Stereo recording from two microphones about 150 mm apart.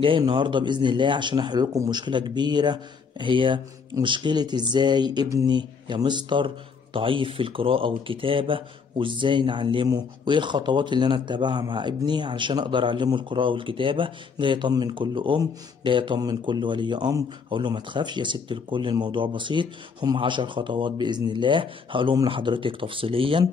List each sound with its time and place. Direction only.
0.2 s a man's voice: 30° right (ahead or behind)